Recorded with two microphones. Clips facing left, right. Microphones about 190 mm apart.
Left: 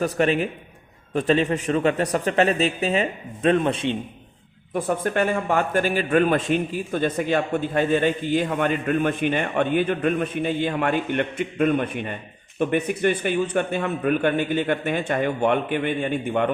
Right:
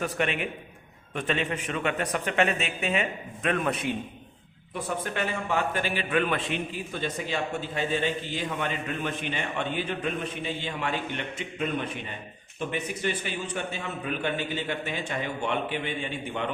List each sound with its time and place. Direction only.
0.0 s speech: 35° left (ahead or behind)
4.7 s a man's voice: 50° left (ahead or behind)